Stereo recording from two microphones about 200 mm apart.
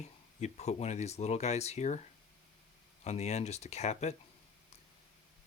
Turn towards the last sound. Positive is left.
turn(degrees=35)  # may be behind; listen again after turning